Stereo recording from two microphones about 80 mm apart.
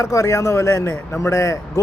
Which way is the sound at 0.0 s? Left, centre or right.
Left.